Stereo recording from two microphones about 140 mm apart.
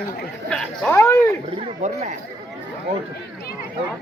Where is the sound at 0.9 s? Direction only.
20° left (ahead or behind).